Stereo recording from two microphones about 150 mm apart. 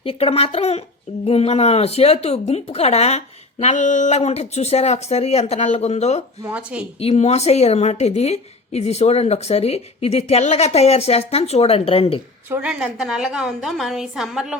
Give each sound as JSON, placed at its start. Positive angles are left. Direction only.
{"t": 0.0, "sound": "speech", "side_deg": 40}
{"t": 6.5, "sound": "speech", "side_deg": -10}
{"t": 7.0, "sound": "speech", "side_deg": 45}
{"t": 12.5, "sound": "a woman's voice", "side_deg": -5}